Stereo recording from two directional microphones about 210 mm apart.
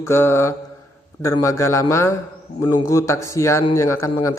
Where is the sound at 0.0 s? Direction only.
10° left (ahead or behind).